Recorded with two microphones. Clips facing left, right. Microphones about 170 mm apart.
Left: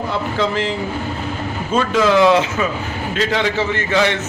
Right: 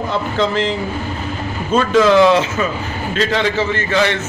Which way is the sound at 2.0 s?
10° left (ahead or behind).